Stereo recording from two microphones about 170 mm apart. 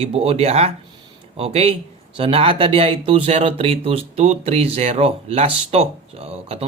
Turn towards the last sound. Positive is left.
turn(degrees=-35)  # may be behind; listen again after turning